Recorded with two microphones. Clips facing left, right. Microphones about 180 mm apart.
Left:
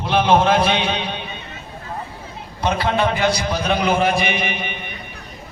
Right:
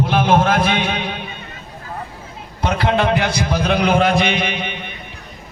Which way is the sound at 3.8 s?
60° right (ahead or behind).